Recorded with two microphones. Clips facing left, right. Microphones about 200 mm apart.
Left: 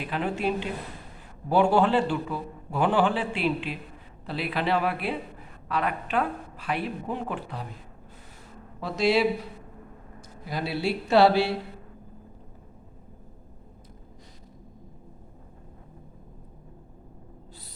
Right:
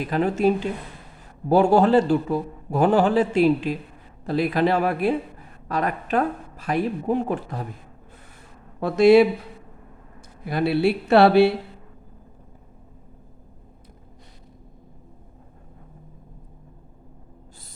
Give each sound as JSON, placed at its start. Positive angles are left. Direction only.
{"t": 0.0, "sound": "a man's voice", "side_deg": -40}
{"t": 8.8, "sound": "a woman's voice", "side_deg": -55}
{"t": 10.4, "sound": "speech", "side_deg": -60}